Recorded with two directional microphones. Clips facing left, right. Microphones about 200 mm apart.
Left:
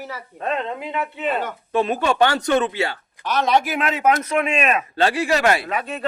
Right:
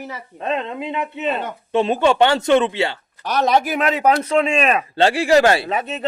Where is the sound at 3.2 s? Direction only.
40° right (ahead or behind); by 6.0 s 25° right (ahead or behind).